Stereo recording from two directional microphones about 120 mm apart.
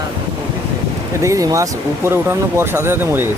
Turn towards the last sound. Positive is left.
turn(degrees=-20)  # may be behind; listen again after turning